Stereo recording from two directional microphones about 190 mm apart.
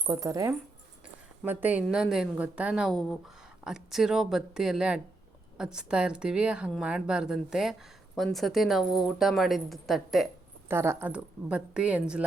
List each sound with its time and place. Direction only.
0.1 s a woman's voice: 20° right (ahead or behind); by 10.2 s centre (ahead or behind)
10.7 s a woman's voice: 10° right (ahead or behind)